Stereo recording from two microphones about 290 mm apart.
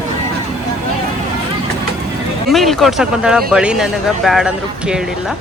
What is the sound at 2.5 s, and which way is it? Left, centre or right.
Speech, centre.